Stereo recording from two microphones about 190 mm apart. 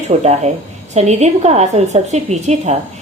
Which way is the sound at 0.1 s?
35° right (ahead or behind).